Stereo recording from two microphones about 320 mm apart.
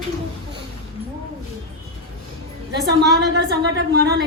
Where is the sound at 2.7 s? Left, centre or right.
Right.